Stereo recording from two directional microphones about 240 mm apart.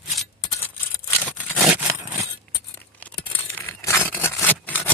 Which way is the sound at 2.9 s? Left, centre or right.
Centre.